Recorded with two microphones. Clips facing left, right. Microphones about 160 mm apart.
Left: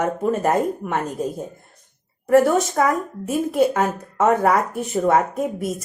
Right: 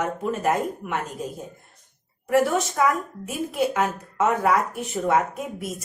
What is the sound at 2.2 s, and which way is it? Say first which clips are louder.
A woman's voice: left 5 dB; 45° left (ahead or behind).